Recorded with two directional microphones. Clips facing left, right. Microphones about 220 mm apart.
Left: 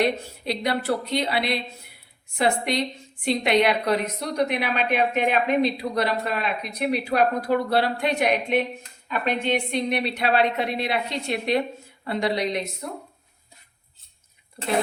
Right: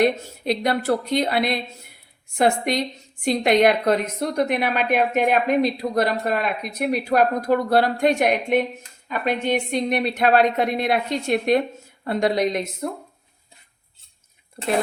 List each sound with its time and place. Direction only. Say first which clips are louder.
0.0 s a woman's voice: right 4 dB; 50° right (ahead or behind)